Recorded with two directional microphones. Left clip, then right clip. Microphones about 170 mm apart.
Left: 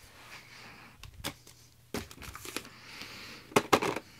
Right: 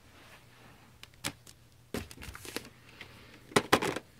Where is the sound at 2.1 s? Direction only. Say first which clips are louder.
Left 1 dB; 40° right (ahead or behind).